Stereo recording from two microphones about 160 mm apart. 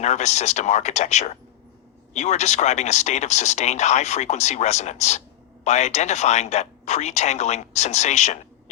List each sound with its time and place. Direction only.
0.0 s speech: 45° left (ahead or behind)